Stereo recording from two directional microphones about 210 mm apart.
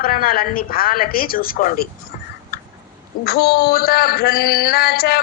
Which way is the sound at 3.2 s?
50° left (ahead or behind).